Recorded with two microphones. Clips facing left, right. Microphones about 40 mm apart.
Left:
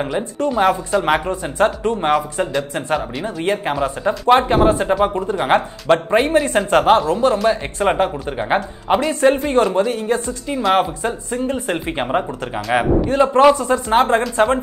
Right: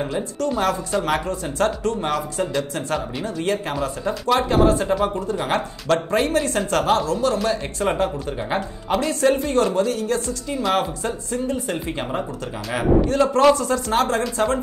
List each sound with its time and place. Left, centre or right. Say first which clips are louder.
0.0 s speech: left 4 dB; left
11.5 s speech: left 4 dB; left
13.1 s speech: left 6 dB; left